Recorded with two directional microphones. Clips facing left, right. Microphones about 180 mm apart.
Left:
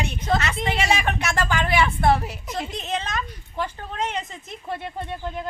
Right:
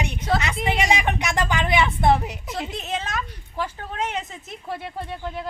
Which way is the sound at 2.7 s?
5° right (ahead or behind).